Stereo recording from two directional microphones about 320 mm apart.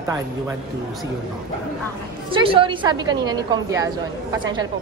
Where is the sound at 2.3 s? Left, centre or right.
Centre.